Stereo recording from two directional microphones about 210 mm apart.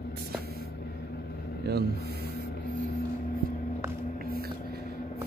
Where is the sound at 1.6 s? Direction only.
50° right (ahead or behind).